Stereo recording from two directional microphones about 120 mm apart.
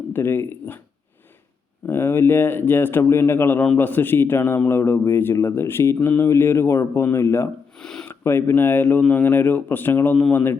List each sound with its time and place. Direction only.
0.1 s speech: 20° left (ahead or behind)
1.9 s speech: 20° left (ahead or behind)
7.8 s a sound: 5° left (ahead or behind)
8.2 s speech: 20° left (ahead or behind)